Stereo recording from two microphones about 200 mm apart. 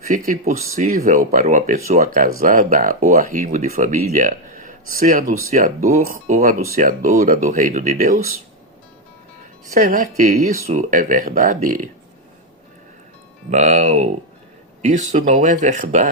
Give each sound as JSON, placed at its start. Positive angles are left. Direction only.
{"t": 0.0, "sound": "speech", "side_deg": -40}
{"t": 9.7, "sound": "speech", "side_deg": -40}
{"t": 13.5, "sound": "speech", "side_deg": -35}